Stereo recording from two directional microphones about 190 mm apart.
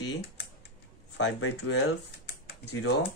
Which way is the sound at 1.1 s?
75° left (ahead or behind).